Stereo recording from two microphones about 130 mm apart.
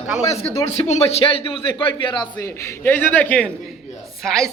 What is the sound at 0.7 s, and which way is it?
A man's voice, 55° left (ahead or behind).